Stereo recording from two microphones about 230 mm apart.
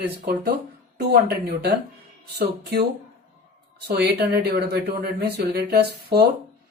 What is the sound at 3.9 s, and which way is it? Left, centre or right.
Speech, right.